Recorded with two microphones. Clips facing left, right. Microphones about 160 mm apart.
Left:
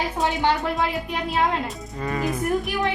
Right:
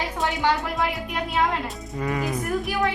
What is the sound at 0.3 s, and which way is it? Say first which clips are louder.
Speech: left 1 dB; 20° left (ahead or behind).